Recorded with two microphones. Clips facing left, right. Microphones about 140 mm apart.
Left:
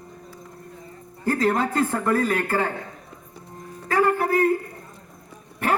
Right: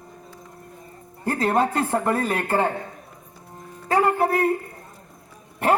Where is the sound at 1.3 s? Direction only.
25° right (ahead or behind).